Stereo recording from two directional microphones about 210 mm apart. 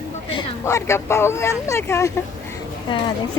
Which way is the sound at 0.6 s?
15° left (ahead or behind).